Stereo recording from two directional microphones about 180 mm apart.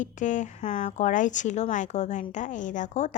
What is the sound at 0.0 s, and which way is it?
Speech, 45° left (ahead or behind).